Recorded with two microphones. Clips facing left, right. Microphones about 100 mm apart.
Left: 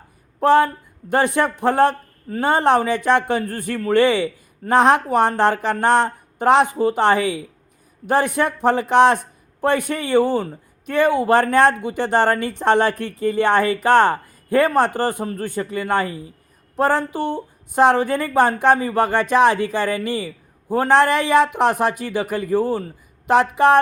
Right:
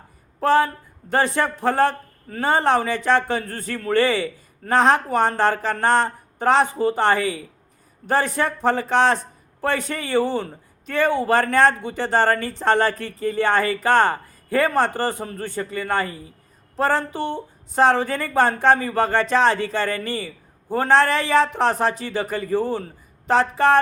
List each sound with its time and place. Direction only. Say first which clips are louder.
0.3 s a woman's voice: left 3 dB; 15° left (ahead or behind)